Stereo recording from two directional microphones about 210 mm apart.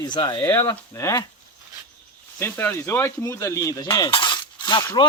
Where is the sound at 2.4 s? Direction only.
10° left (ahead or behind).